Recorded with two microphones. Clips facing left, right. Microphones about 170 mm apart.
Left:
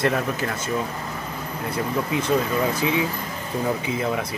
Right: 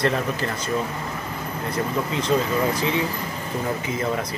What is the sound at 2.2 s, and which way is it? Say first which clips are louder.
Speech: right 2 dB; 10° left (ahead or behind).